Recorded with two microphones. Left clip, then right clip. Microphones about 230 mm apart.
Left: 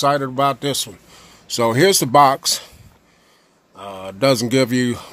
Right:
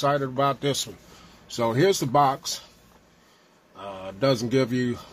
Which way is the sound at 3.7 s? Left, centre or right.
Left.